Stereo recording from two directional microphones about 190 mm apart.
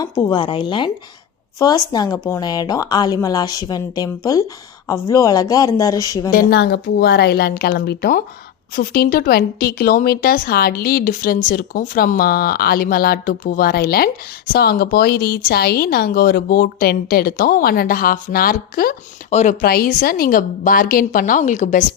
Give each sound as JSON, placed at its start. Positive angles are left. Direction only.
{"t": 0.0, "sound": "speech", "side_deg": 25}
{"t": 6.3, "sound": "a woman's voice", "side_deg": 55}
{"t": 19.3, "sound": "speech", "side_deg": 35}
{"t": 19.6, "sound": "speech", "side_deg": 50}